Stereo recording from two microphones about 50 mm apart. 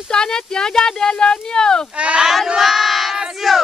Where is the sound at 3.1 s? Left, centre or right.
Centre.